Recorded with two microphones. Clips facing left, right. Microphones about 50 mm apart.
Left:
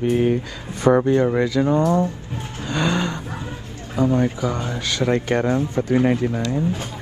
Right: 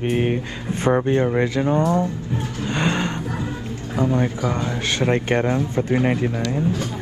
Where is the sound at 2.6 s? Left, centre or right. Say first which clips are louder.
Left 1 dB; right.